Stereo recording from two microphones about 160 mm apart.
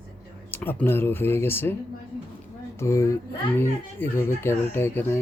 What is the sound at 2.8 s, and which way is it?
Speech, 15° left (ahead or behind).